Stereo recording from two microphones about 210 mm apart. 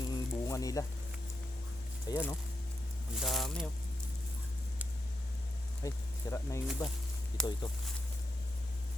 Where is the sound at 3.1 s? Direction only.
Centre (ahead or behind).